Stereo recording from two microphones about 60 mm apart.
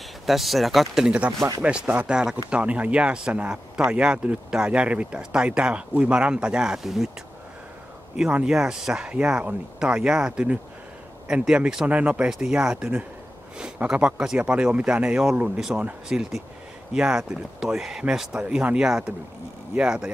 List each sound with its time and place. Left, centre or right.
0.3 s speech: centre
1.6 s speech: centre
8.2 s speech: centre
16.1 s speech: centre
18.3 s speech: centre